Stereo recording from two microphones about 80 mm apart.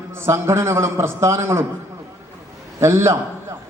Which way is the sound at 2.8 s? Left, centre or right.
Right.